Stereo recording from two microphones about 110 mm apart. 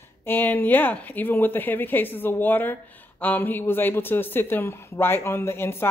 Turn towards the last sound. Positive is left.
turn(degrees=20)  # may be behind; listen again after turning